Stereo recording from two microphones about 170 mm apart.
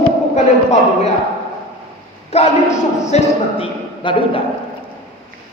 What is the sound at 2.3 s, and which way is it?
Speech, 40° left (ahead or behind).